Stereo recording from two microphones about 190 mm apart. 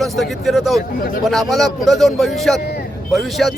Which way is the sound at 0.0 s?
Centre (ahead or behind).